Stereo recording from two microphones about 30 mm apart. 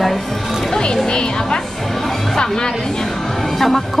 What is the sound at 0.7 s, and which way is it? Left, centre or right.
Speech, left.